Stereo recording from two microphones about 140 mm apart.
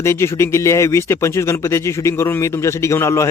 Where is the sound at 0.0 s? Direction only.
20° left (ahead or behind).